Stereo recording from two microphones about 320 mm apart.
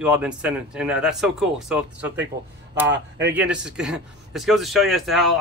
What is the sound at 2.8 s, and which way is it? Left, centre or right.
Speech, right.